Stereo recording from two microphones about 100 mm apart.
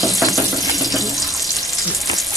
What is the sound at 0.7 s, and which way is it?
Frying, centre (ahead or behind).